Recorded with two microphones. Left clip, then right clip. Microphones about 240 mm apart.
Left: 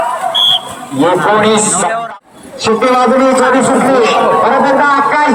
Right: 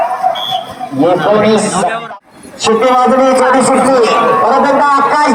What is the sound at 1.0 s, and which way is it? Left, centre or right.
Speech, centre.